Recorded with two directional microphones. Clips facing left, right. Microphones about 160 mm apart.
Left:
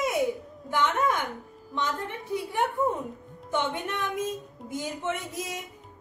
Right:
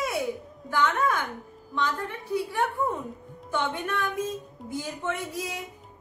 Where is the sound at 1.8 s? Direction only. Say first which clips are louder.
Right 1 dB; 20° left (ahead or behind).